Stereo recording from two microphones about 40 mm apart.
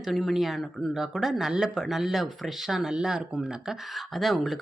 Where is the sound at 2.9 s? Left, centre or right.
Centre.